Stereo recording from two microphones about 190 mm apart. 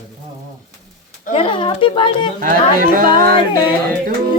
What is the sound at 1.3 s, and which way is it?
Speech, 25° left (ahead or behind).